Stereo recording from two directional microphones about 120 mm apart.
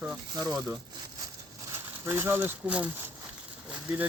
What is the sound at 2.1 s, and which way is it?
Speech, 20° right (ahead or behind).